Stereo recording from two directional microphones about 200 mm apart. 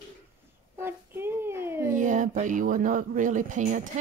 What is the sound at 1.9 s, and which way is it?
Speech, 40° right (ahead or behind).